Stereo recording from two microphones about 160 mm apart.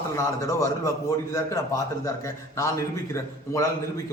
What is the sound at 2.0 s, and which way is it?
A man's voice, 20° left (ahead or behind).